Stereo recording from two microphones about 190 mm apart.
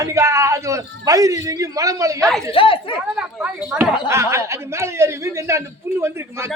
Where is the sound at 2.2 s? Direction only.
Centre (ahead or behind).